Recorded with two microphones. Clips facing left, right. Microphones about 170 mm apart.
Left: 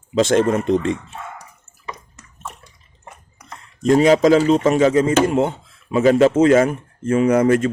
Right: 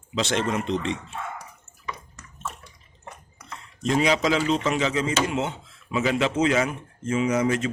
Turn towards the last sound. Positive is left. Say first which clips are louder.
# left 8 dB
turn(degrees=55)  # may be behind; listen again after turning